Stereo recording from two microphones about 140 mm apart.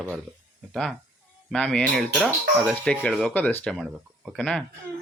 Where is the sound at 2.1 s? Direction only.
5° right (ahead or behind).